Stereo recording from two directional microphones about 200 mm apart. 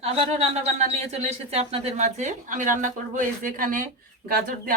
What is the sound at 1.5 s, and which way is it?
Speech, 30° right (ahead or behind).